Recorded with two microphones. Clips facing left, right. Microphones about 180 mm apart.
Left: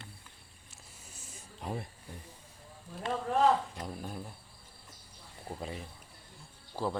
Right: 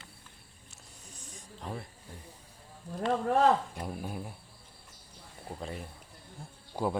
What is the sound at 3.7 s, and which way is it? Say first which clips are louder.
Speech: right 3 dB; 10° right (ahead or behind).